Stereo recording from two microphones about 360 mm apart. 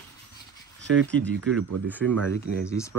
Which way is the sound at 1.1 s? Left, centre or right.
Centre.